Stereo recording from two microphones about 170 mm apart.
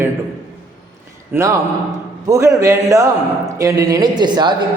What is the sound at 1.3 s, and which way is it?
A man's voice, 15° right (ahead or behind).